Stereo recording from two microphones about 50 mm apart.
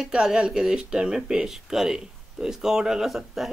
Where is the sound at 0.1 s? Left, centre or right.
Centre.